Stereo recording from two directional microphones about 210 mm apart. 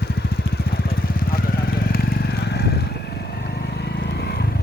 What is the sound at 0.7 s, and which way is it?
Vehicle, 45° left (ahead or behind).